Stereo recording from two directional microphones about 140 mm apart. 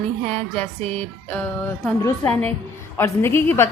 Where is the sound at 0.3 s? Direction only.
10° left (ahead or behind).